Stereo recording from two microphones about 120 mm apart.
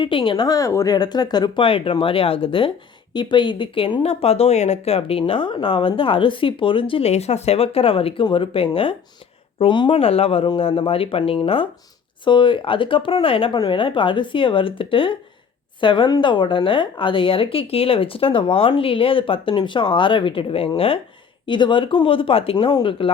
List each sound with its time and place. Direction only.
0.0 s speech: 45° left (ahead or behind)
1.6 s speech: 50° left (ahead or behind)
7.1 s speech: 65° left (ahead or behind); by 9.9 s 40° left (ahead or behind)
9.9 s speech: 55° left (ahead or behind)